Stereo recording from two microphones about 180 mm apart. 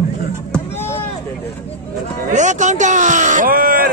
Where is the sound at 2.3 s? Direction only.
40° right (ahead or behind).